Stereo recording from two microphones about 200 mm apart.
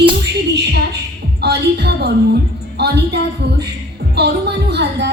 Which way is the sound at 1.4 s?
55° right (ahead or behind).